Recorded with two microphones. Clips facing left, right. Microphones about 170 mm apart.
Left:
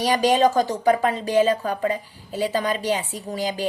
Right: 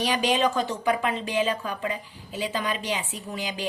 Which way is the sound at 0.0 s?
45° left (ahead or behind).